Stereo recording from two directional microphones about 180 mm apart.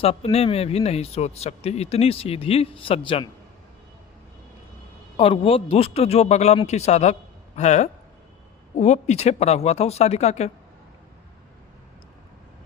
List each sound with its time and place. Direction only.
0.0 s speech: 35° left (ahead or behind)
5.1 s speech: 30° left (ahead or behind)